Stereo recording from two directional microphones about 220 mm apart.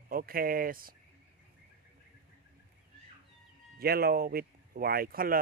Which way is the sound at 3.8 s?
45° right (ahead or behind).